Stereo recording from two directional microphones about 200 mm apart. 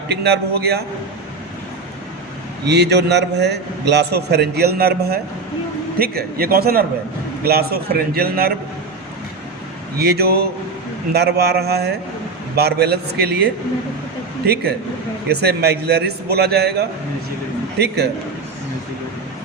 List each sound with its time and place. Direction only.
0.1 s a man's voice: 55° right (ahead or behind)
2.6 s a man's voice: 55° right (ahead or behind)
10.0 s a man's voice: 50° right (ahead or behind)